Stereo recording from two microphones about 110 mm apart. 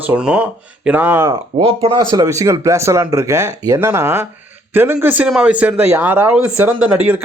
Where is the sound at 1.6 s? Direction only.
60° right (ahead or behind).